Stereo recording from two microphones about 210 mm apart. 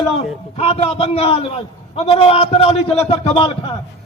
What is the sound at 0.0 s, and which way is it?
A man's voice, 30° left (ahead or behind).